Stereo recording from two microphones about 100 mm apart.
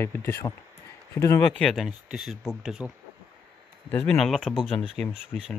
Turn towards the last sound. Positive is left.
turn(degrees=0)  # may be behind; listen again after turning